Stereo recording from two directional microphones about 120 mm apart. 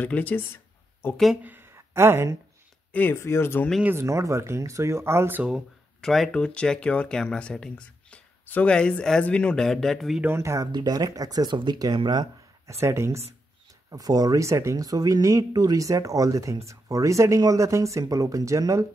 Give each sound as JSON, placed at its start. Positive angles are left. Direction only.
{"t": 0.0, "sound": "speech", "side_deg": 15}
{"t": 1.1, "sound": "speech", "side_deg": 0}
{"t": 1.4, "sound": "a sound", "side_deg": -15}
{"t": 2.9, "sound": "speech", "side_deg": 15}
{"t": 3.8, "sound": "speech", "side_deg": -20}
{"t": 5.5, "sound": "speech", "side_deg": 0}
{"t": 10.2, "sound": "speech", "side_deg": -20}
{"t": 12.8, "sound": "speech", "side_deg": -25}